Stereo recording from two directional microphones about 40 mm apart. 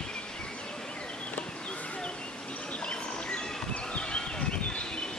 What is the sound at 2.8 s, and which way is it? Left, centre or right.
Bird, left.